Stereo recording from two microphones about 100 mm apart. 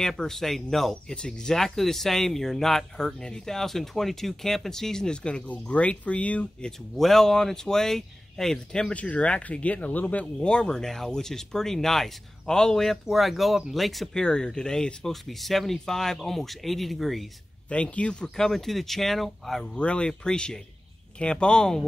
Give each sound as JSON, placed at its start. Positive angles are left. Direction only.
{"t": 0.0, "sound": "speech", "side_deg": 5}
{"t": 17.6, "sound": "speech", "side_deg": 10}